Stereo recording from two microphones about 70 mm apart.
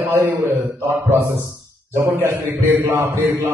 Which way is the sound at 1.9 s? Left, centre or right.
Right.